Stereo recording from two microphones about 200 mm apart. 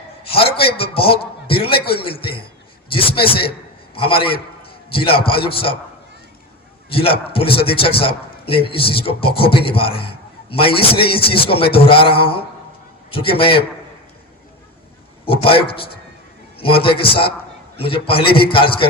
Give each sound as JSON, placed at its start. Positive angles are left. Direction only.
{"t": 0.3, "sound": "a man's voice", "side_deg": 30}
{"t": 2.9, "sound": "a man's voice", "side_deg": 25}
{"t": 6.9, "sound": "a man's voice", "side_deg": 30}
{"t": 15.2, "sound": "a man's voice", "side_deg": 25}